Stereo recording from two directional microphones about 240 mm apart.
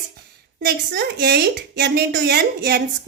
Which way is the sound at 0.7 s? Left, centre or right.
Right.